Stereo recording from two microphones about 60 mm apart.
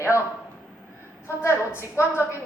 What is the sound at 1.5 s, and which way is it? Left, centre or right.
Speech, left.